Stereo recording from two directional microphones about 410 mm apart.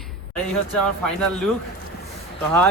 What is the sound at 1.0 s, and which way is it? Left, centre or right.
Speech, centre.